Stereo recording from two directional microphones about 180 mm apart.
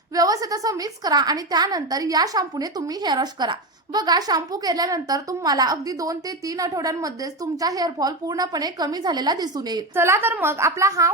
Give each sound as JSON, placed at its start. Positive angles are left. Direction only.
{"t": 0.1, "sound": "a woman's voice", "side_deg": -20}